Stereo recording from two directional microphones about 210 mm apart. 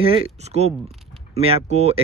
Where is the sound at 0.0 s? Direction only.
25° right (ahead or behind).